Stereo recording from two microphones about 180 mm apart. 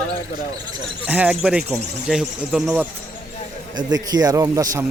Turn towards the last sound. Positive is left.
turn(degrees=-20)  # may be behind; listen again after turning